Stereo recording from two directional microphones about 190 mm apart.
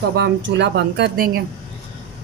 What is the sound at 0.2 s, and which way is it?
Speech, 65° right (ahead or behind).